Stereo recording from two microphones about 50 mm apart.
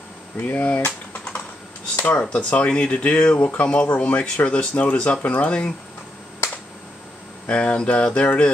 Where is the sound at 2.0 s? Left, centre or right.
Left.